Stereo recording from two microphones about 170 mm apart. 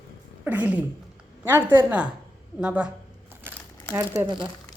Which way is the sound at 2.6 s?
5° right (ahead or behind).